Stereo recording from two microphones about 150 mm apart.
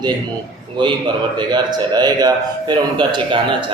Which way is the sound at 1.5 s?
30° right (ahead or behind).